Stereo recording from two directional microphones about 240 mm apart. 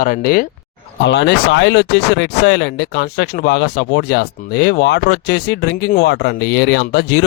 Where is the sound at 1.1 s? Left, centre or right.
Left.